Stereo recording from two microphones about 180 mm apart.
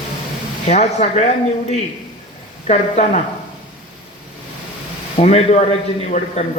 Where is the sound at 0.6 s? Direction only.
40° left (ahead or behind).